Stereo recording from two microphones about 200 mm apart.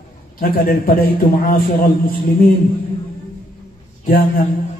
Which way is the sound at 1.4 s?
45° left (ahead or behind).